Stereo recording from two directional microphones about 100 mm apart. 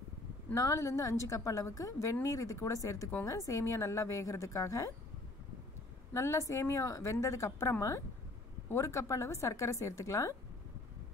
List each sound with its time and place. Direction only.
0.6 s a woman's voice: 35° left (ahead or behind)
6.1 s a woman's voice: 30° left (ahead or behind)